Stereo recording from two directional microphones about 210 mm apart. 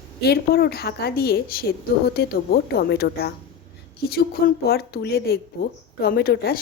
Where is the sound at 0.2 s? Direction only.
50° left (ahead or behind).